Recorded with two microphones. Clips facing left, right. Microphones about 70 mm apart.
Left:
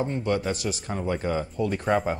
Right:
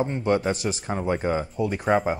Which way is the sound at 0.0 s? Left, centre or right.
Right.